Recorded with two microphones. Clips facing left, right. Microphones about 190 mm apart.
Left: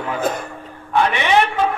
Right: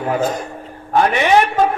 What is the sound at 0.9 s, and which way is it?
Speech, 40° right (ahead or behind).